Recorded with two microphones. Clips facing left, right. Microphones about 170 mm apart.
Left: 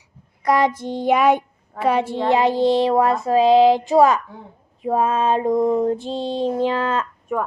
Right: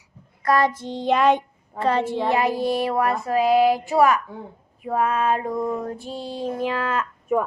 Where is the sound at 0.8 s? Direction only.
10° left (ahead or behind).